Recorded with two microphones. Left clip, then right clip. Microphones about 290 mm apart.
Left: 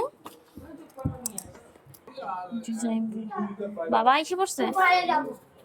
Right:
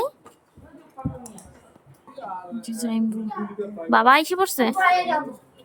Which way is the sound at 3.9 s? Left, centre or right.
Centre.